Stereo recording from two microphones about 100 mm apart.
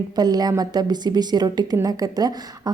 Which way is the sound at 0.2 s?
40° right (ahead or behind).